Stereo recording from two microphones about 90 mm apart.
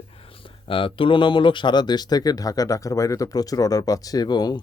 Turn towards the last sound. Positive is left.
turn(degrees=50)  # may be behind; listen again after turning